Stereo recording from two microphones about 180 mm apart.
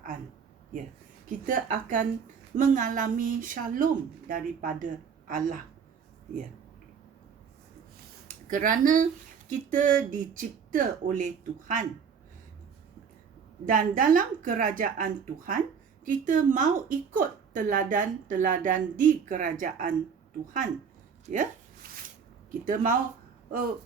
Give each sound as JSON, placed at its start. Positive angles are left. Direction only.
{"t": 1.3, "sound": "a woman's voice", "side_deg": -45}
{"t": 8.4, "sound": "a woman's voice", "side_deg": -45}
{"t": 13.7, "sound": "a woman's voice", "side_deg": -50}
{"t": 21.3, "sound": "a woman's voice", "side_deg": -40}
{"t": 21.8, "sound": "a sound", "side_deg": -55}
{"t": 22.6, "sound": "a woman's voice", "side_deg": -45}